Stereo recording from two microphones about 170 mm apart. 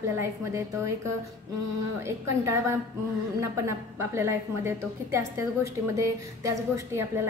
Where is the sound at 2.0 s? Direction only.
15° right (ahead or behind).